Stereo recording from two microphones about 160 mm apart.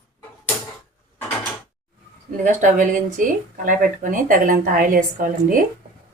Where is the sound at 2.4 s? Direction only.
50° right (ahead or behind).